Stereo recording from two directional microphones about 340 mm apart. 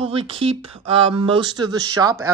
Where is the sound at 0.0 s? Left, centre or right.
Centre.